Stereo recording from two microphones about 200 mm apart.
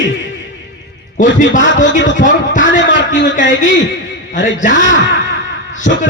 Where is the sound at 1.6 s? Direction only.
70° left (ahead or behind).